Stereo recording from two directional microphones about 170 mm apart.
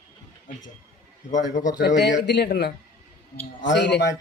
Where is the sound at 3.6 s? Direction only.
90° left.